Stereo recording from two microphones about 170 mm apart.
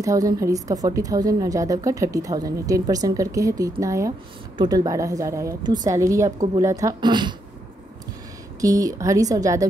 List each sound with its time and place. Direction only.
0.0 s a woman's voice: 20° right (ahead or behind)
8.5 s a woman's voice: 20° right (ahead or behind)